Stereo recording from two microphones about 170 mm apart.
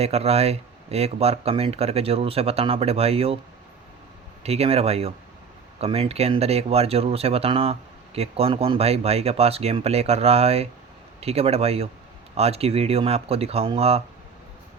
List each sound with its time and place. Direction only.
0.0 s speech: 35° right (ahead or behind)
4.4 s speech: 35° right (ahead or behind)